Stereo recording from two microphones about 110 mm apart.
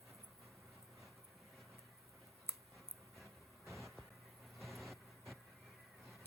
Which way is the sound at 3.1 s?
Centre (ahead or behind).